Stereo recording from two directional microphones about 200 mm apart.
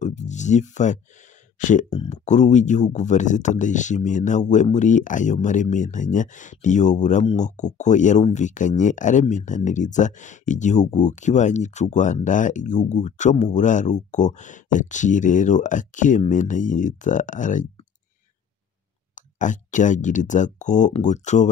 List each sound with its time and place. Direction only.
0.0 s a sound: 35° left (ahead or behind)
1.6 s speech: 40° left (ahead or behind)
19.1 s speech: 40° left (ahead or behind)